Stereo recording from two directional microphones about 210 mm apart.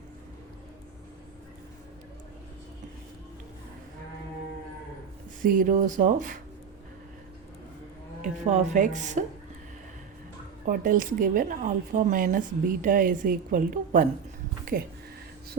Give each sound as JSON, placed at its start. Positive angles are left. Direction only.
{"t": 5.4, "sound": "speech", "side_deg": -40}
{"t": 8.2, "sound": "speech", "side_deg": -35}
{"t": 10.7, "sound": "speech", "side_deg": -40}